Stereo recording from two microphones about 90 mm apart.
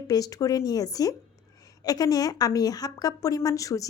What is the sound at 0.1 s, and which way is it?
A woman's voice, 40° left (ahead or behind).